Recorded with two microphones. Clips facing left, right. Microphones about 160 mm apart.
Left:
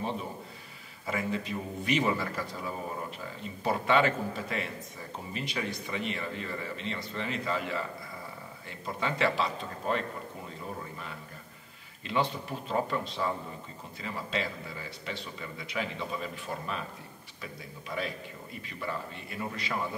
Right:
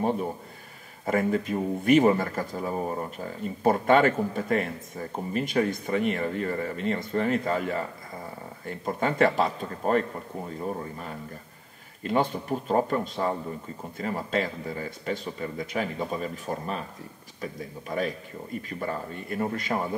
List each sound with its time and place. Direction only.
1.0 s speech: 50° right (ahead or behind)
12.0 s speech: 45° right (ahead or behind)